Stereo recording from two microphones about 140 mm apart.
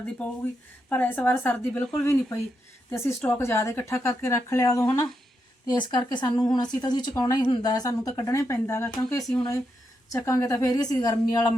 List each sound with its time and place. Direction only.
0.2 s speech: 5° left (ahead or behind); by 5.0 s 20° left (ahead or behind)
5.7 s a woman's voice: 30° left (ahead or behind)